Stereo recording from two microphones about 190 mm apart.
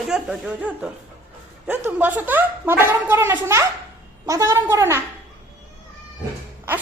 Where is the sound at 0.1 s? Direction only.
5° right (ahead or behind).